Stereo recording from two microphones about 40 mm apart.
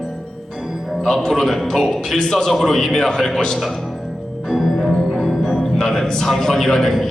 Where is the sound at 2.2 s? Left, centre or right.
Centre.